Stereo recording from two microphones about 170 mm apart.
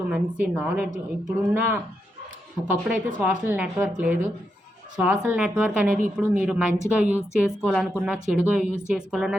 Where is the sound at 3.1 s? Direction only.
10° right (ahead or behind).